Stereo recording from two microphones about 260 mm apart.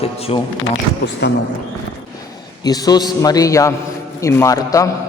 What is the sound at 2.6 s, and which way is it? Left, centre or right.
A man's voice, centre.